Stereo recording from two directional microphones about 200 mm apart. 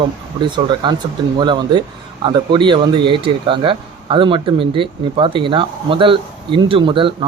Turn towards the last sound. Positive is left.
turn(degrees=-25)  # may be behind; listen again after turning